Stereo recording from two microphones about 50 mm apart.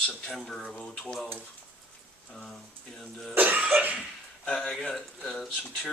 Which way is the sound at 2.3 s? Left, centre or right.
Centre.